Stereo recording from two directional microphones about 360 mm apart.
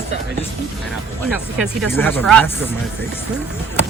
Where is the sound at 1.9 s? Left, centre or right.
Centre.